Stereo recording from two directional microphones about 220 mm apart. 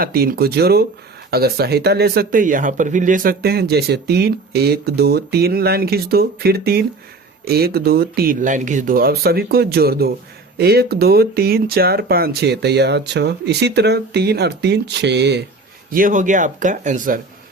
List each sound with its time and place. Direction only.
0.0 s speech: 45° right (ahead or behind)
15.9 s speech: 40° right (ahead or behind)